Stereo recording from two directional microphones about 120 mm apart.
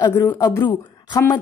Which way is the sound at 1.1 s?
25° left (ahead or behind).